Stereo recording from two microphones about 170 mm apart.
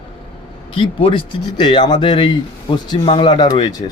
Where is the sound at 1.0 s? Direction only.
30° left (ahead or behind).